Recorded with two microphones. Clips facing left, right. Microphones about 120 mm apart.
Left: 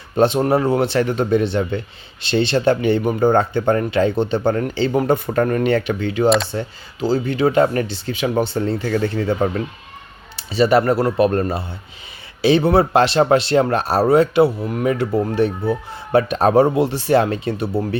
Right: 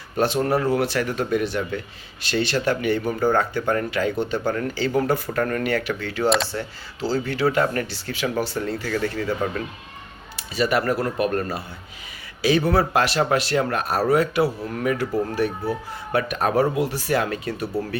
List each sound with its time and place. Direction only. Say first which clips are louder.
0.2 s speech: left 5 dB; 20° left (ahead or behind)